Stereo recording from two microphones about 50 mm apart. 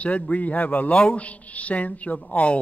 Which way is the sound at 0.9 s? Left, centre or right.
Left.